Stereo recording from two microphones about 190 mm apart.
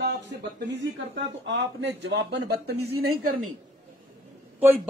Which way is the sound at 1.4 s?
70° right (ahead or behind).